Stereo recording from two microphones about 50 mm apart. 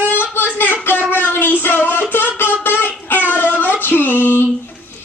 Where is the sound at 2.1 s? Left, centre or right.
Left.